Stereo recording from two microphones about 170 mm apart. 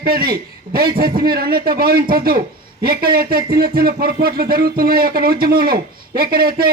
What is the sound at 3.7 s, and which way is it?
A man's voice, 60° right (ahead or behind).